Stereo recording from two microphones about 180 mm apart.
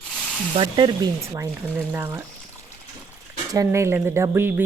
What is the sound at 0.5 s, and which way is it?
Speech, 30° right (ahead or behind).